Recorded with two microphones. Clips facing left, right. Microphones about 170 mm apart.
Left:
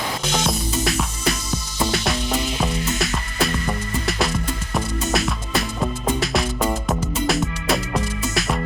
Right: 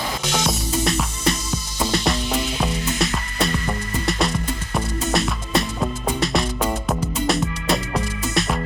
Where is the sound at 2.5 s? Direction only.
Centre (ahead or behind).